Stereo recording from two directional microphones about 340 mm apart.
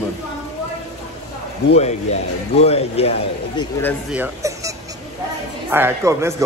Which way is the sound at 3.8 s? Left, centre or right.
Centre.